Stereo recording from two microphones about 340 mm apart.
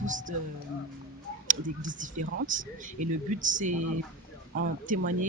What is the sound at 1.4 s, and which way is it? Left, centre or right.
Speech, right.